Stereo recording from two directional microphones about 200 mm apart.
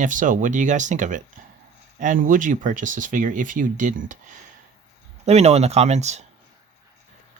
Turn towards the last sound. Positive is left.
turn(degrees=-35)  # may be behind; listen again after turning